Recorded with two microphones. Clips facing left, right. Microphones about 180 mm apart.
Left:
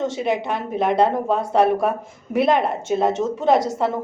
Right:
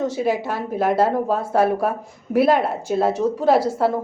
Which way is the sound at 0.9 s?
5° right (ahead or behind).